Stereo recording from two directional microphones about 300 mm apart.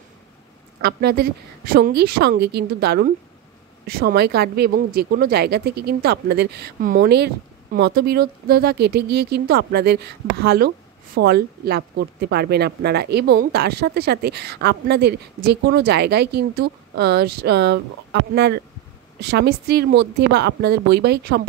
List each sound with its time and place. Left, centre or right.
0.7 s speech: right